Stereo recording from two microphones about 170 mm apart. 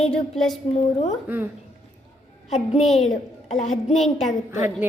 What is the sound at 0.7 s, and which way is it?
Speech, 40° left (ahead or behind).